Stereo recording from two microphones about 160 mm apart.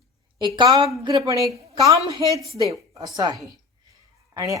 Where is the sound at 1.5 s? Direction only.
40° right (ahead or behind).